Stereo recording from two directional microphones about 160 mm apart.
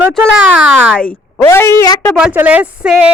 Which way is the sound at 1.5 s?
15° left (ahead or behind).